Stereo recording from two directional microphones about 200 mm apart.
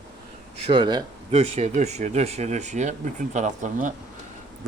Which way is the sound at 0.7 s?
25° right (ahead or behind).